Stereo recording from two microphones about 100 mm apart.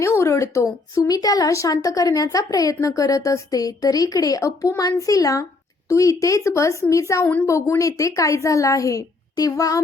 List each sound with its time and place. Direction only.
0.0 s a woman's voice: 30° left (ahead or behind)